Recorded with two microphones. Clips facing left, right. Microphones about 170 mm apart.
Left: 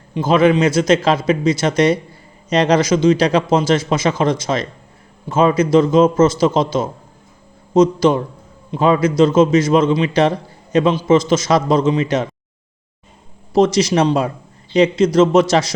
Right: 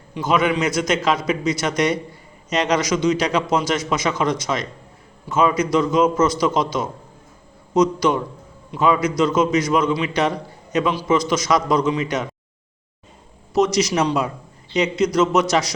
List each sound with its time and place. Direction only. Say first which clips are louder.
0.1 s a man's voice: left 6 dB; 30° left (ahead or behind)
13.5 s a man's voice: left 4 dB; 30° left (ahead or behind)